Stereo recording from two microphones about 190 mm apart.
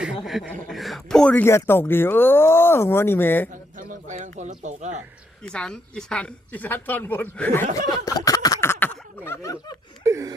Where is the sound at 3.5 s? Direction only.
45° right (ahead or behind).